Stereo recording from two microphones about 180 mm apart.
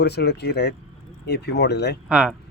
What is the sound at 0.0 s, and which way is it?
Speech, 65° left (ahead or behind).